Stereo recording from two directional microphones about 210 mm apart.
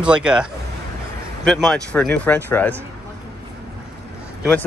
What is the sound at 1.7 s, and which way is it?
Speech, centre (ahead or behind).